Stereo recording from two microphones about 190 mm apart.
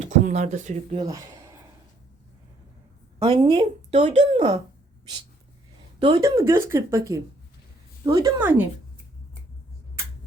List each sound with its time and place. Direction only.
0.0 s speech: 40° right (ahead or behind)
3.2 s speech: 30° right (ahead or behind)
6.0 s a woman's voice: 25° right (ahead or behind)